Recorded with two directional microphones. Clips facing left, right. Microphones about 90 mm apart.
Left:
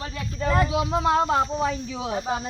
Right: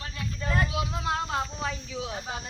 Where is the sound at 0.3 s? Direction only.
90° left.